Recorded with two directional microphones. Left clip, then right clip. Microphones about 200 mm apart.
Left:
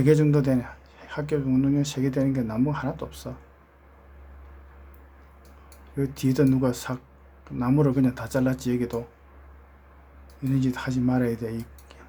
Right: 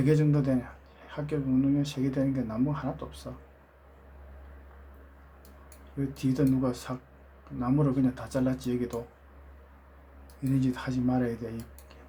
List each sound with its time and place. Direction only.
0.0 s speech: 30° left (ahead or behind)
6.0 s speech: 30° left (ahead or behind)
10.5 s speech: 20° left (ahead or behind)